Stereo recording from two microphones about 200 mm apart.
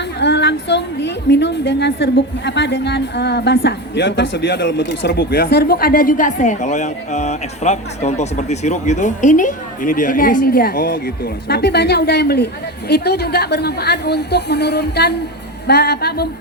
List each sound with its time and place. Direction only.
0.2 s a woman's voice: 60° left (ahead or behind)